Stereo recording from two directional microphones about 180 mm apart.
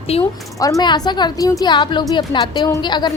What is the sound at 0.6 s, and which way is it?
A woman's voice, 20° left (ahead or behind).